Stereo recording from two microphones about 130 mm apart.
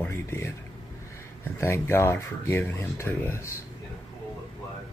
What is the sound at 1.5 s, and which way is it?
Speech, 20° left (ahead or behind).